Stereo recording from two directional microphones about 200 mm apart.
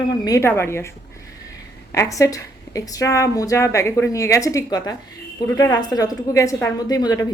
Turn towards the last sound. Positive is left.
turn(degrees=20)  # may be behind; listen again after turning